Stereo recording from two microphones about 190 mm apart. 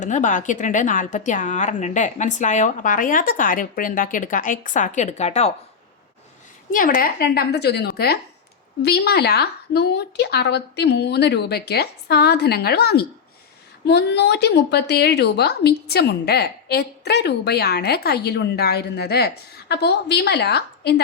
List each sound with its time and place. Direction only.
0.0 s a woman's voice: 40° left (ahead or behind)
6.7 s a woman's voice: 45° left (ahead or behind)